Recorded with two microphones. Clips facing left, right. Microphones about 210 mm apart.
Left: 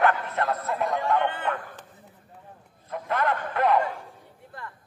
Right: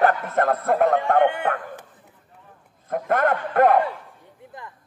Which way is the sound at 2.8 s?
50° right (ahead or behind).